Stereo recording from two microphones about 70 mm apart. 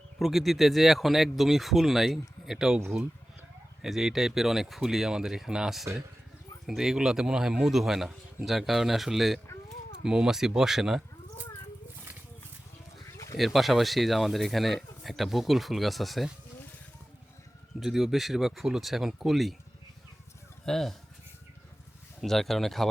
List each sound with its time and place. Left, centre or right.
0.2 s speech: centre
3.8 s speech: centre
13.4 s speech: centre
17.7 s speech: centre
20.7 s speech: centre
22.2 s speech: centre